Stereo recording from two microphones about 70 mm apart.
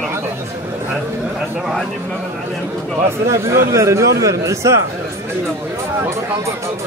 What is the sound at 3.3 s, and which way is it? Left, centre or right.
Speech, right.